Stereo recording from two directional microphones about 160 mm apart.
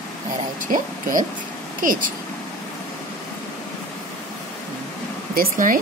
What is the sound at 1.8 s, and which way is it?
Speech, 60° right (ahead or behind).